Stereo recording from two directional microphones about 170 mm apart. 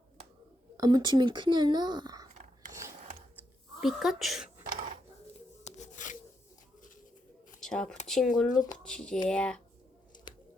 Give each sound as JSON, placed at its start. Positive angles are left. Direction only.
{"t": 0.8, "sound": "speech", "side_deg": -25}
{"t": 2.3, "sound": "whispering", "side_deg": -45}
{"t": 3.8, "sound": "speech", "side_deg": 0}
{"t": 5.6, "sound": "a sound", "side_deg": 45}
{"t": 7.6, "sound": "speech", "side_deg": 5}
{"t": 8.4, "sound": "speech", "side_deg": 25}
{"t": 8.8, "sound": "speech", "side_deg": 5}
{"t": 10.3, "sound": "a sound", "side_deg": 25}